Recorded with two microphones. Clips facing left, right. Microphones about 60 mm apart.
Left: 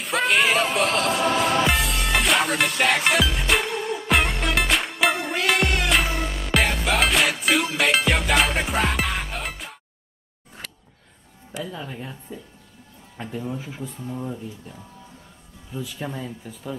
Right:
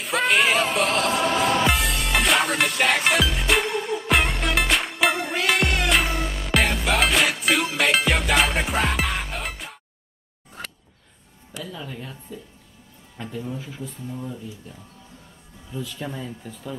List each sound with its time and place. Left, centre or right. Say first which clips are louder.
0.0 s music: even; centre
11.6 s speech: left 1 dB; left
15.7 s speech: even; centre